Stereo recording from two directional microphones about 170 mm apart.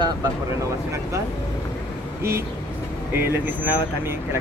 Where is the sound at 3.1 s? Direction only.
10° right (ahead or behind).